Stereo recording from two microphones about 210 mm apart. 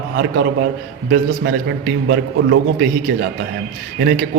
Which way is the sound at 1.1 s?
50° right (ahead or behind).